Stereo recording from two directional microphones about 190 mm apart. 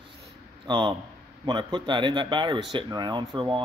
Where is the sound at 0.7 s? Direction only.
25° right (ahead or behind).